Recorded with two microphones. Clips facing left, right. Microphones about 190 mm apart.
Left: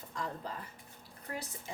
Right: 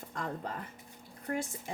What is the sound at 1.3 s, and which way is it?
Speech, 55° right (ahead or behind).